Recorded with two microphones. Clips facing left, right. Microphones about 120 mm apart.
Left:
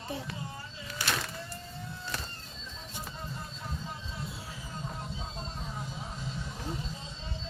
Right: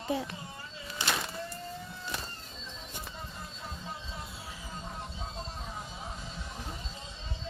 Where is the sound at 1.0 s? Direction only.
20° right (ahead or behind).